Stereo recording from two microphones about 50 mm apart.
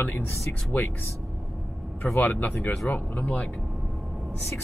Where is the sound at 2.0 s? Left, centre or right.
Left.